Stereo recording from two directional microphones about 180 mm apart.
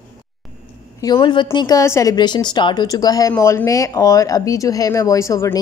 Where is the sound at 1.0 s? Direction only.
25° left (ahead or behind).